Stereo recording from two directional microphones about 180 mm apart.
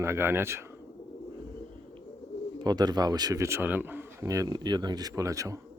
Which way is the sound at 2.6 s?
20° right (ahead or behind).